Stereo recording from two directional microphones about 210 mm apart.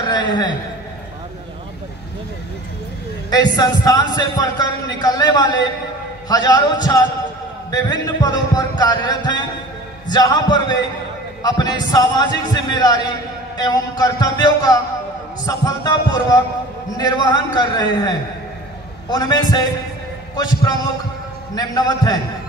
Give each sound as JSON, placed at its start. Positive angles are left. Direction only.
{"t": 0.1, "sound": "a sound", "side_deg": 20}
{"t": 3.3, "sound": "a man's voice", "side_deg": 20}
{"t": 15.4, "sound": "music", "side_deg": 15}
{"t": 16.9, "sound": "a man's voice", "side_deg": 20}
{"t": 21.5, "sound": "music", "side_deg": 20}